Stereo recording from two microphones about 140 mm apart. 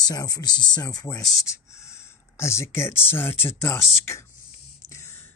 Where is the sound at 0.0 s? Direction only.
30° left (ahead or behind).